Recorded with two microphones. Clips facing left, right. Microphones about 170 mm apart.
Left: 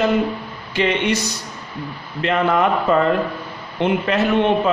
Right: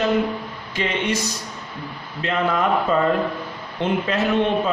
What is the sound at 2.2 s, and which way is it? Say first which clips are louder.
Speech: left 4 dB; 65° left (ahead or behind).